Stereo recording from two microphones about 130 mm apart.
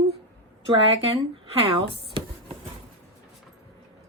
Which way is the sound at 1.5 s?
45° right (ahead or behind).